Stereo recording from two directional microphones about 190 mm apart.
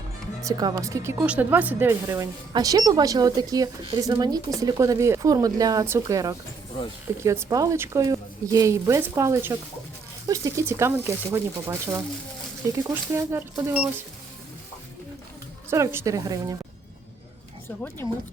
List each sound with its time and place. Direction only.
0.4 s speech: 20° right (ahead or behind)
15.7 s speech: 15° right (ahead or behind)